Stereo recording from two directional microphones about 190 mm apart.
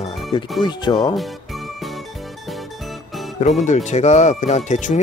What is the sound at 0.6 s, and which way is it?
Speech, 25° left (ahead or behind).